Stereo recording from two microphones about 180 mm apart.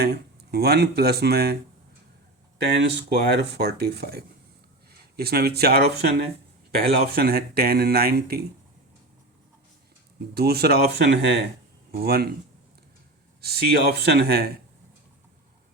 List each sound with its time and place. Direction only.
0.5 s speech: 65° right (ahead or behind)
2.8 s speech: 70° right (ahead or behind)
10.3 s speech: 60° right (ahead or behind)
13.4 s speech: 60° right (ahead or behind)